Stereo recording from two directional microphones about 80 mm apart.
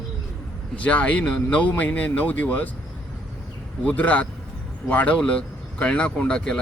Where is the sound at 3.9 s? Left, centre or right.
Centre.